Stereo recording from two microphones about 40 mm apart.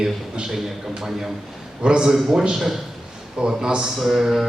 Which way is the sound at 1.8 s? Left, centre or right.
Right.